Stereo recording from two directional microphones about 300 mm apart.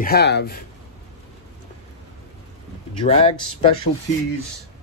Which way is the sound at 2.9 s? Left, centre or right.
Centre.